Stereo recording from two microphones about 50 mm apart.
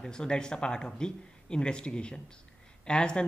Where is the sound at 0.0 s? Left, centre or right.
Centre.